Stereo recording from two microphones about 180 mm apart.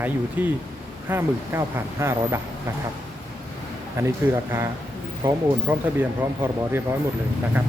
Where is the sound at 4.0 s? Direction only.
15° right (ahead or behind).